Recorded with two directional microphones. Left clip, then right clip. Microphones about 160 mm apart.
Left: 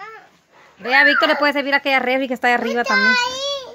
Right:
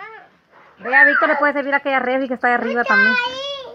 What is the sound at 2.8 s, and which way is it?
Speech, 40° left (ahead or behind).